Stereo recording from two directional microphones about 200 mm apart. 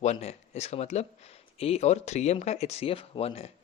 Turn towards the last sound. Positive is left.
turn(degrees=30)  # may be behind; listen again after turning